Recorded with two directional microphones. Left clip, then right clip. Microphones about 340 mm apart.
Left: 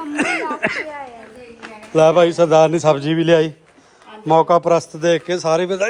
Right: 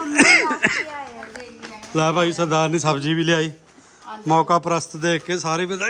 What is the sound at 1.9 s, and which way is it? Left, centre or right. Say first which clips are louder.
A man's voice: left 8 dB; centre.